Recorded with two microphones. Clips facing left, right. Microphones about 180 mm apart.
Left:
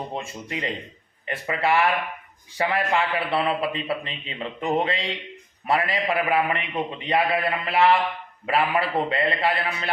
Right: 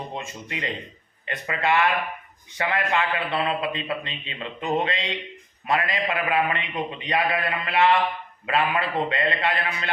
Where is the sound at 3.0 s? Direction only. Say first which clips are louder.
Left 1 dB; 30° left (ahead or behind).